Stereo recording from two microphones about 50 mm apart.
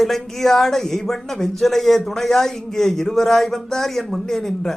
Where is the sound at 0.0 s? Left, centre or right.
Centre.